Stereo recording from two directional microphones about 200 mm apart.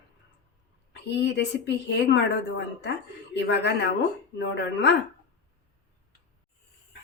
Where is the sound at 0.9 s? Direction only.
60° left (ahead or behind).